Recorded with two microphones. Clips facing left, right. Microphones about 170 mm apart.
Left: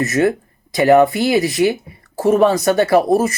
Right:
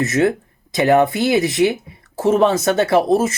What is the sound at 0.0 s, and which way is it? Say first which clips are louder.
Speech: left 1 dB; centre (ahead or behind).